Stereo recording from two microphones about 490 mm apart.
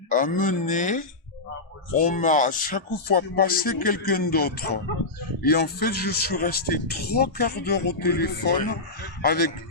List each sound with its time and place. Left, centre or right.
0.1 s speech: centre